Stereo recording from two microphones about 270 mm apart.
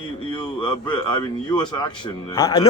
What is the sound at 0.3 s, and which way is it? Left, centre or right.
Speech, centre.